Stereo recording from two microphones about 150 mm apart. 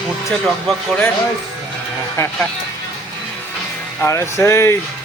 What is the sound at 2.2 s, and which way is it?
Speech, 15° left (ahead or behind).